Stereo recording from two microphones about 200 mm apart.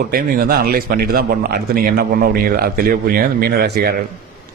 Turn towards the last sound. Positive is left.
turn(degrees=-50)  # may be behind; listen again after turning